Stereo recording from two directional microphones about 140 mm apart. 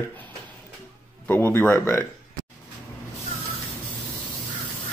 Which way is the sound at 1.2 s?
15° left (ahead or behind).